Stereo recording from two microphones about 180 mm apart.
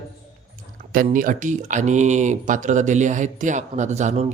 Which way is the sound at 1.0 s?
45° right (ahead or behind).